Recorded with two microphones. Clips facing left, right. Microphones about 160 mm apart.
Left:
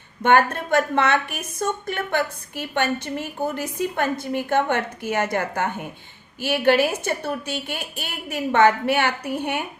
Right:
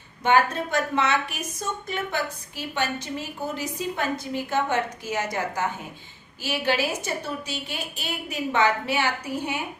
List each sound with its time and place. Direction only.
0.2 s a woman's voice: 55° left (ahead or behind)